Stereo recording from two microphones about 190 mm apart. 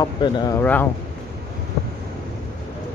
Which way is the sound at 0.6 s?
10° left (ahead or behind).